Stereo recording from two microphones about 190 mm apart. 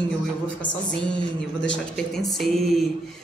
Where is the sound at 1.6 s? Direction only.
70° left (ahead or behind).